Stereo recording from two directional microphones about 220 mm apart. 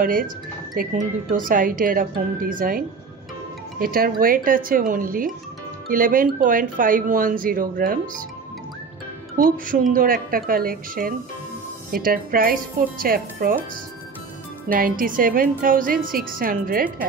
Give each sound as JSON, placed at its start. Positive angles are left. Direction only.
{"t": 0.0, "sound": "speech", "side_deg": -40}
{"t": 3.8, "sound": "speech", "side_deg": -40}
{"t": 9.4, "sound": "speech", "side_deg": -40}
{"t": 14.7, "sound": "speech", "side_deg": -40}